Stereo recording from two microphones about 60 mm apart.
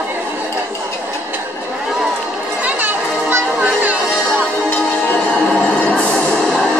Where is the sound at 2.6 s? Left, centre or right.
Right.